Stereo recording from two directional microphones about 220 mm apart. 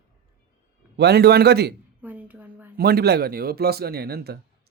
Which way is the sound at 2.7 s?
45° right (ahead or behind).